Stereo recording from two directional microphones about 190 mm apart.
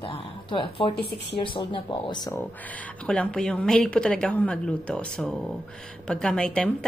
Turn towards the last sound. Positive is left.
turn(degrees=5)  # may be behind; listen again after turning